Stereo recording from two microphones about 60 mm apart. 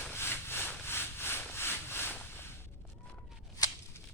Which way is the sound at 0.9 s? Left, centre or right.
Left.